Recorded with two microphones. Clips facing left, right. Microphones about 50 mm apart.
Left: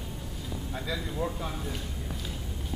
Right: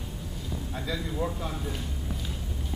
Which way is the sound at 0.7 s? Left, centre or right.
Centre.